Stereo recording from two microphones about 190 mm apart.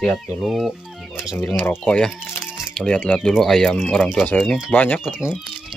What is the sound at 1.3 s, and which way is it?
Speech, 10° left (ahead or behind).